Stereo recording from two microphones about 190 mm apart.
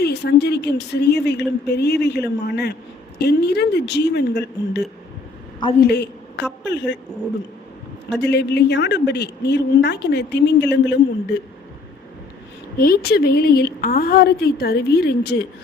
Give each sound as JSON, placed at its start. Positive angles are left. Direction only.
{"t": 0.0, "sound": "a woman's voice", "side_deg": 60}
{"t": 5.8, "sound": "a woman's voice", "side_deg": 60}
{"t": 8.2, "sound": "a woman's voice", "side_deg": 60}
{"t": 12.7, "sound": "a woman's voice", "side_deg": 50}